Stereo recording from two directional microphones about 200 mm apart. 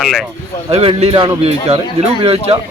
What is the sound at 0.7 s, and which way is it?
A man's voice, 30° right (ahead or behind).